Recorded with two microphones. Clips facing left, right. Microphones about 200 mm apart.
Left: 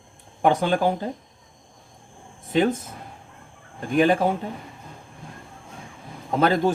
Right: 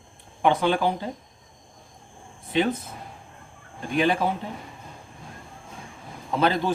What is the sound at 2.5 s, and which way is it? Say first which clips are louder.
Speech: left 3 dB; 45° left (ahead or behind).